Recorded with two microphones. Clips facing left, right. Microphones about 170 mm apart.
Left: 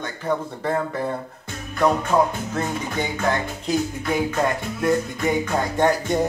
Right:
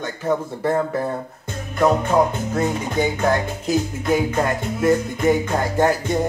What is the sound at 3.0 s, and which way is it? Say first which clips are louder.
Music: right 5 dB; 10° right (ahead or behind).